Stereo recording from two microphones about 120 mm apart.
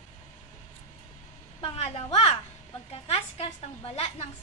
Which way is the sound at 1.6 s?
55° left (ahead or behind).